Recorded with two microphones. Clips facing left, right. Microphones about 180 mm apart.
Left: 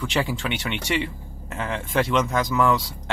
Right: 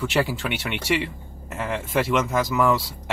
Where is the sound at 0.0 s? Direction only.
5° right (ahead or behind).